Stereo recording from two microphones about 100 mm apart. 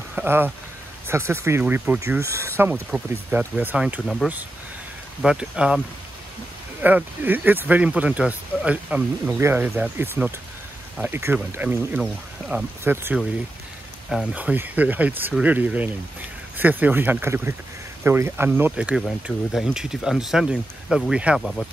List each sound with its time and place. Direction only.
0.1 s speech: 20° right (ahead or behind)
1.6 s speech: 15° right (ahead or behind)
2.0 s speech: 30° right (ahead or behind)
2.9 s speech: 10° right (ahead or behind)
4.0 s speech: 5° left (ahead or behind)
5.2 s speech: 10° right (ahead or behind)
6.8 s speech: 15° right (ahead or behind)
14.3 s speech: 15° right (ahead or behind)
19.2 s speech: 5° right (ahead or behind)
21.4 s speech: 5° left (ahead or behind)